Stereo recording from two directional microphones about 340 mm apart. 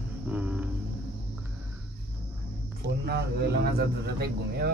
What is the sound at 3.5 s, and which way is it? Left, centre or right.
Speech, right.